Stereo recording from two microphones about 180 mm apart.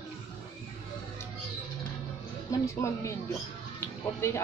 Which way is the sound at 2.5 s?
20° left (ahead or behind).